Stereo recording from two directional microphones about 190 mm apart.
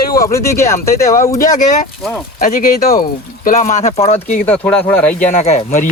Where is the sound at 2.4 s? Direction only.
50° left (ahead or behind).